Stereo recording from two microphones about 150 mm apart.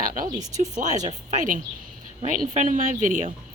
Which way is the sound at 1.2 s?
55° right (ahead or behind).